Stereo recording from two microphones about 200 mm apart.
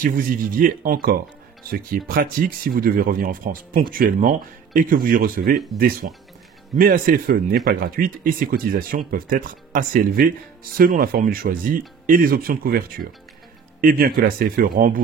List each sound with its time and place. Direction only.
0.0 s speech: 45° right (ahead or behind)